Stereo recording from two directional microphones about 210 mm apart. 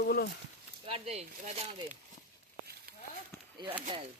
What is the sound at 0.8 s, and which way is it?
Speech, 30° right (ahead or behind).